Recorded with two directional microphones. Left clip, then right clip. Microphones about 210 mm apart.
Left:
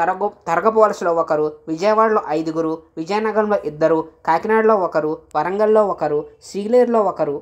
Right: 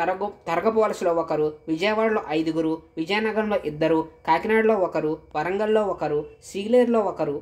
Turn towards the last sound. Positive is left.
turn(degrees=20)  # may be behind; listen again after turning